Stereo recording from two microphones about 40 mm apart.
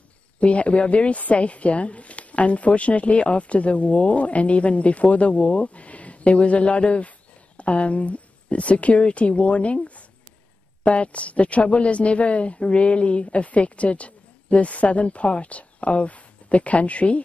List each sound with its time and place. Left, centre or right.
0.4 s speech: left